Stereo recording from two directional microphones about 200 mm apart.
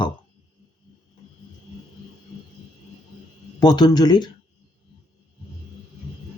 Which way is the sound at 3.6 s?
20° left (ahead or behind).